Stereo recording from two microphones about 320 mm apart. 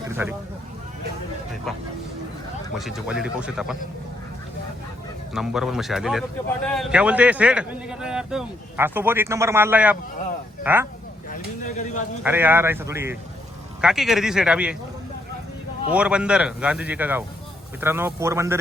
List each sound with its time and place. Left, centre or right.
0.2 s speech: centre
2.7 s a man's voice: centre
5.3 s a man's voice: centre
11.3 s bird: left
12.2 s a man's voice: centre
15.9 s a man's voice: centre